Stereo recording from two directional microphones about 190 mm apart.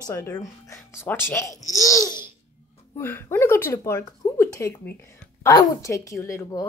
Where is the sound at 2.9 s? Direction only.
10° left (ahead or behind).